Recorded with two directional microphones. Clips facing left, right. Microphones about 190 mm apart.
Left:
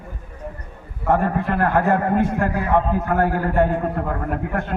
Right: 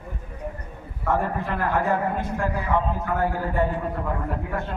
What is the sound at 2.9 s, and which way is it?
A man's voice, 65° left (ahead or behind).